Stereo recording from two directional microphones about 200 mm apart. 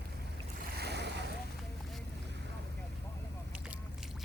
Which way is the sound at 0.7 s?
55° right (ahead or behind).